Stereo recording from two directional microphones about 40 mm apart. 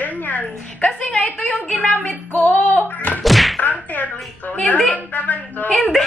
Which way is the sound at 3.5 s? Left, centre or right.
Left.